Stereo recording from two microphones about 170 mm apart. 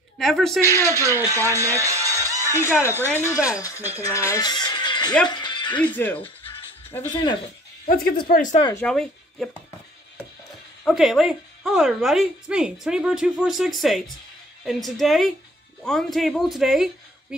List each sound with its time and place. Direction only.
0.2 s speech: centre (ahead or behind)
0.6 s speech: 15° right (ahead or behind)
2.5 s speech: 15° left (ahead or behind)
2.8 s speech: 15° right (ahead or behind)
3.5 s speech: 20° left (ahead or behind)
5.3 s music: 25° left (ahead or behind)
5.8 s speech: 10° left (ahead or behind)
7.1 s speech: 25° left (ahead or behind)
7.8 s speech: 55° left (ahead or behind)
8.7 s speech: 5° left (ahead or behind)
10.5 s speech: centre (ahead or behind)